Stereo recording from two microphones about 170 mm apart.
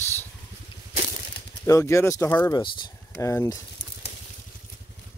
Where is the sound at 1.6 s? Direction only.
15° left (ahead or behind).